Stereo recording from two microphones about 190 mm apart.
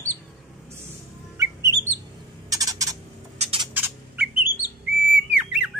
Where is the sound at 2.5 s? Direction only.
20° right (ahead or behind).